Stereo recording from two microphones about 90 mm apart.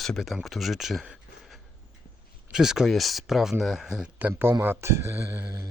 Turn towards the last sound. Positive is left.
turn(degrees=-20)  # may be behind; listen again after turning